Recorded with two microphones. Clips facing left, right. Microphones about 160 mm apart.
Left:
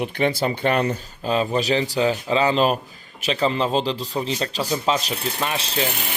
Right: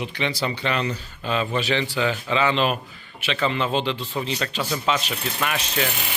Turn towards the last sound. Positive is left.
turn(degrees=30)  # may be behind; listen again after turning